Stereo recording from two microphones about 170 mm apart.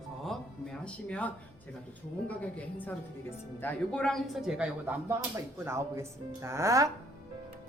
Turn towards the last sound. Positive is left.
turn(degrees=-20)  # may be behind; listen again after turning